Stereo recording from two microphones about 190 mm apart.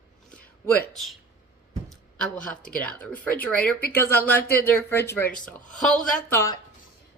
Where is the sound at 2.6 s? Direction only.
45° left (ahead or behind).